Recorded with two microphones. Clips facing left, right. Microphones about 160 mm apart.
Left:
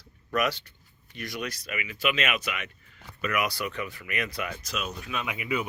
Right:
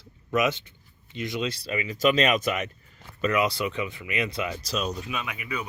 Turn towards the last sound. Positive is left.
turn(degrees=20)  # may be behind; listen again after turning